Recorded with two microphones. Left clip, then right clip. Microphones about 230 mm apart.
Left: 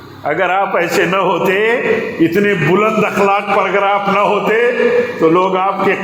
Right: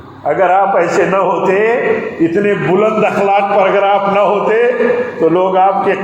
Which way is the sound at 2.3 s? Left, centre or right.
Left.